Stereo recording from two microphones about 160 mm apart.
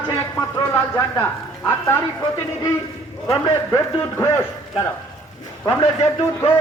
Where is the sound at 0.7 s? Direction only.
15° left (ahead or behind).